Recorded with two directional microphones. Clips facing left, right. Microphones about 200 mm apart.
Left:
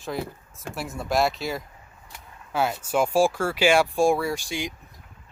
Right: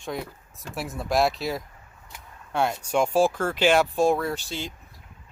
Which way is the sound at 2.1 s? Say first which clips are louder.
Even; 5° left (ahead or behind).